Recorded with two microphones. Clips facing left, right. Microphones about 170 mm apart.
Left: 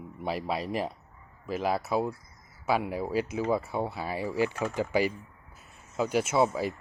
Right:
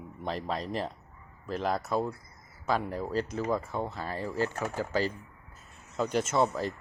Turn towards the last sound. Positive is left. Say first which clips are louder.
# left 2 dB
turn(degrees=10)  # may be behind; listen again after turning